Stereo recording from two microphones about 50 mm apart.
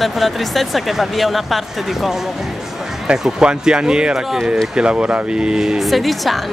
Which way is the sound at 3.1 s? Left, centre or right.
Centre.